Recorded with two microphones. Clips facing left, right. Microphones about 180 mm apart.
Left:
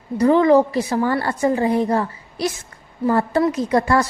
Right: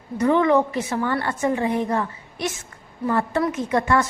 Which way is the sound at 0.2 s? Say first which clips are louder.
Left 4 dB; 35° left (ahead or behind).